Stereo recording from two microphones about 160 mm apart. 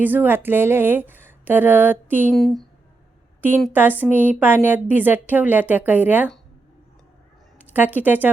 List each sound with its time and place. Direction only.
0.0 s speech: 10° right (ahead or behind)
2.3 s a woman's voice: centre (ahead or behind)
3.7 s speech: 10° right (ahead or behind)
7.6 s speech: 10° right (ahead or behind)